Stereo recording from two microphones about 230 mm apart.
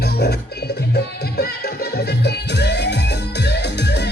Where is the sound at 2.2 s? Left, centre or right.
Left.